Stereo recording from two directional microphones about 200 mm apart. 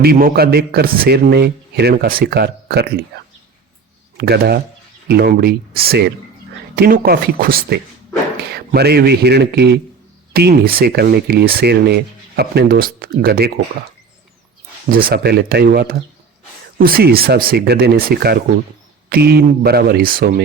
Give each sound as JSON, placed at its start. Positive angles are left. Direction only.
{"t": 0.0, "sound": "speech", "side_deg": -50}
{"t": 4.2, "sound": "speech", "side_deg": -55}
{"t": 14.8, "sound": "speech", "side_deg": -45}